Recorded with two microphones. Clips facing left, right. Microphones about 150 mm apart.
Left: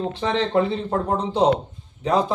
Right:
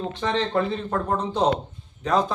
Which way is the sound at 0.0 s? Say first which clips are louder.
Left 2 dB; 25° left (ahead or behind).